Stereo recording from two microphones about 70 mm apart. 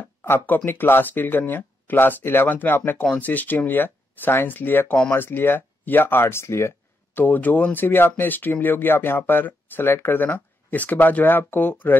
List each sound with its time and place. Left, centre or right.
0.0 s a sound: left
0.7 s speech: left
7.2 s speech: left